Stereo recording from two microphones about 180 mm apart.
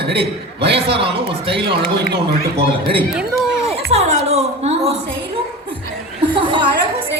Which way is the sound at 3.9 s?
35° right (ahead or behind).